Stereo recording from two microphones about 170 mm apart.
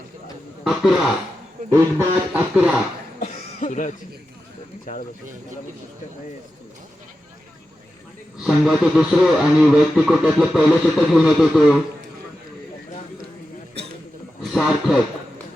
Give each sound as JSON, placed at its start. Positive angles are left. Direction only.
{"t": 0.6, "sound": "speech", "side_deg": 0}
{"t": 1.7, "sound": "speech", "side_deg": -10}
{"t": 3.2, "sound": "cough", "side_deg": 40}
{"t": 4.9, "sound": "speech", "side_deg": 50}
{"t": 8.4, "sound": "speech", "side_deg": 0}
{"t": 14.5, "sound": "speech", "side_deg": 0}